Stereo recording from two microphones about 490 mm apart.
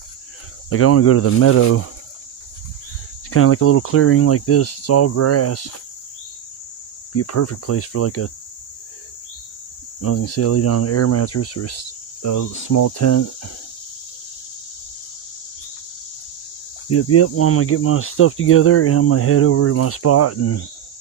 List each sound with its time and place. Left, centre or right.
0.7 s speech: left
3.2 s speech: left
7.1 s speech: left
10.0 s speech: left
16.9 s speech: left